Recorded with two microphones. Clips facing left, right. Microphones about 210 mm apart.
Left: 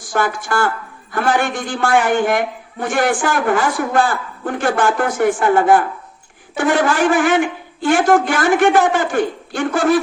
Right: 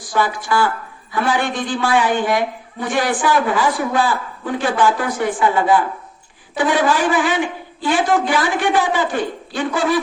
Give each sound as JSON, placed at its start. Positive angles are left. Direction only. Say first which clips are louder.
{"t": 0.1, "sound": "a man's voice", "louder": "even", "side_deg": 50}